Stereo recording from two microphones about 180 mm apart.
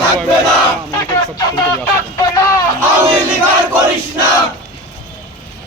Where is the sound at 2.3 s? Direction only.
20° left (ahead or behind).